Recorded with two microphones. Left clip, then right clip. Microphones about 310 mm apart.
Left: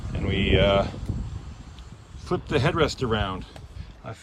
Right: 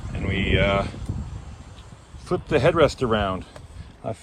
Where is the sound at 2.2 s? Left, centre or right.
Centre.